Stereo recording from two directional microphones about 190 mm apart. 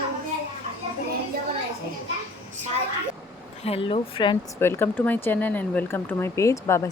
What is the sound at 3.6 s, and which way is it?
Speech, 30° left (ahead or behind).